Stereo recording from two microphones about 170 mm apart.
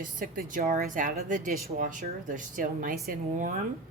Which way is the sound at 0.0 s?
55° right (ahead or behind).